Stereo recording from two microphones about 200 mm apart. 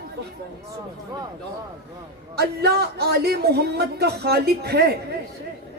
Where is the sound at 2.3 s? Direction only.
55° right (ahead or behind).